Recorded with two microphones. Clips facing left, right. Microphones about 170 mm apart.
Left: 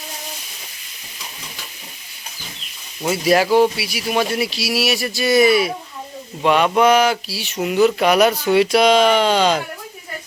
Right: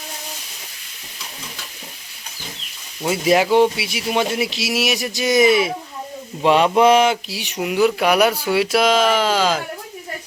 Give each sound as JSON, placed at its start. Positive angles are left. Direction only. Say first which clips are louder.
{"t": 3.2, "sound": "speech", "louder": "even", "side_deg": -15}